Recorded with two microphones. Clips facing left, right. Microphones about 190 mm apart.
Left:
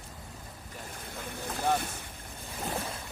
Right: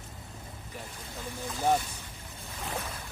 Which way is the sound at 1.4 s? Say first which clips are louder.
Right 2 dB; 60° left (ahead or behind).